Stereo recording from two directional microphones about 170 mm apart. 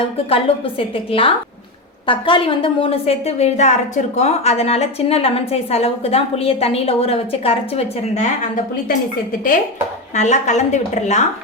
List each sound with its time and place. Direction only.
0.3 s a woman's voice: 35° left (ahead or behind)
10.2 s a woman's voice: 45° left (ahead or behind)